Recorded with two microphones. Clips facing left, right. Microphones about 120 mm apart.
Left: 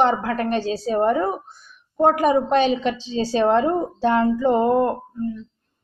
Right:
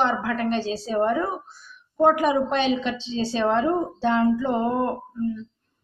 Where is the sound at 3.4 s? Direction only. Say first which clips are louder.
Left 1 dB; 55° left (ahead or behind).